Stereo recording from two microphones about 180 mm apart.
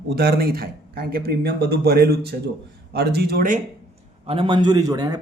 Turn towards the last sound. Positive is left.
turn(degrees=-20)  # may be behind; listen again after turning